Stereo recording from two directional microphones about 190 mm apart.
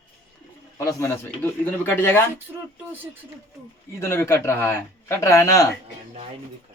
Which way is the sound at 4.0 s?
15° left (ahead or behind).